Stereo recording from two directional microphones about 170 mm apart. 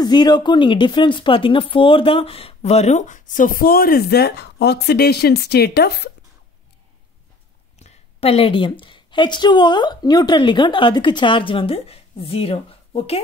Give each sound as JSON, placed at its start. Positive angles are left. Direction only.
{"t": 0.0, "sound": "speech", "side_deg": 25}
{"t": 7.8, "sound": "a woman's voice", "side_deg": 35}